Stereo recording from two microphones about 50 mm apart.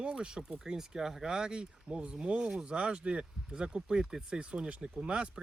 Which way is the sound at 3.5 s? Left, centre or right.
Centre.